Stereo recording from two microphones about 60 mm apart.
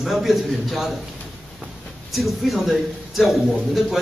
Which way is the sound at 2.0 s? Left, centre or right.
Centre.